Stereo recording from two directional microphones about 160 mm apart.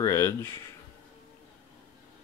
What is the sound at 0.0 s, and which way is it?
Speech, 15° left (ahead or behind).